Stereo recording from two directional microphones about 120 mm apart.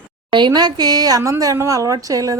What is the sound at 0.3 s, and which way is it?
A woman's voice, 40° right (ahead or behind).